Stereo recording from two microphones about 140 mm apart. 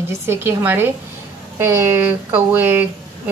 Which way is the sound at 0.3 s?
15° right (ahead or behind).